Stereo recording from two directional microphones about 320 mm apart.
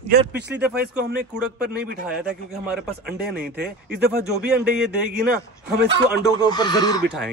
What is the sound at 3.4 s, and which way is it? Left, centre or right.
Speech, right.